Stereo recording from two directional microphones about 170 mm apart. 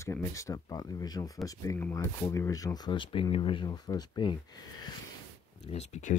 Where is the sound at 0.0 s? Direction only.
20° left (ahead or behind).